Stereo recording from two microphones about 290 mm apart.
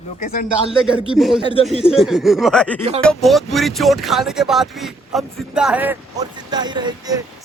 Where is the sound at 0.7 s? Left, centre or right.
Centre.